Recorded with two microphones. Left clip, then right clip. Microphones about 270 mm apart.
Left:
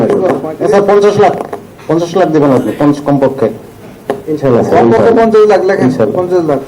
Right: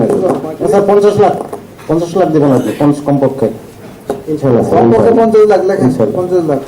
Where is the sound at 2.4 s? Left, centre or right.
Left.